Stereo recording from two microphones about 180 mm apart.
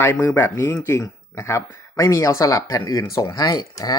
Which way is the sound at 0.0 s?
15° left (ahead or behind).